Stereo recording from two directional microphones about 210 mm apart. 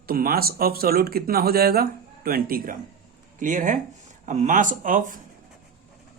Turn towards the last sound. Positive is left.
turn(degrees=-40)  # may be behind; listen again after turning